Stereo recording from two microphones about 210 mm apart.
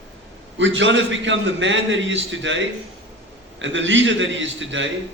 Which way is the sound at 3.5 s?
60° right (ahead or behind).